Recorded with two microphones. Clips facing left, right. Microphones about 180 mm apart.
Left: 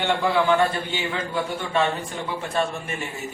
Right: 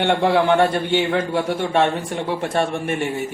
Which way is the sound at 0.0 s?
65° right (ahead or behind).